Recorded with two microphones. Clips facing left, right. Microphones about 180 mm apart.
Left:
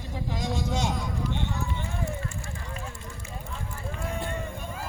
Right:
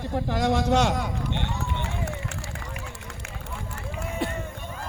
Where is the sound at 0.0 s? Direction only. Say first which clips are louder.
Right 7 dB; 65° right (ahead or behind).